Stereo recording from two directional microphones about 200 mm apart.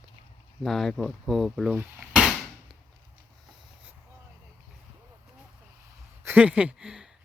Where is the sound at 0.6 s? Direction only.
Centre (ahead or behind).